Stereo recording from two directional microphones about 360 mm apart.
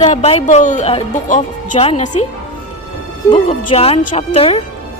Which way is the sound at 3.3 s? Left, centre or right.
Centre.